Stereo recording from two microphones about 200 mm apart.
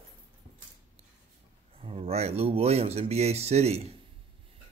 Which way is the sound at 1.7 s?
30° right (ahead or behind).